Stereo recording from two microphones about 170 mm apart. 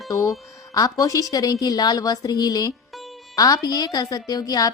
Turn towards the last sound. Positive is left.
turn(degrees=20)  # may be behind; listen again after turning